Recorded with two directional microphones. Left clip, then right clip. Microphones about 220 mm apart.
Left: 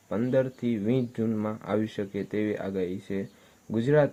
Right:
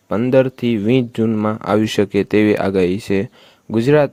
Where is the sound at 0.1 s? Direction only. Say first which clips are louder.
Right 12 dB; 40° right (ahead or behind).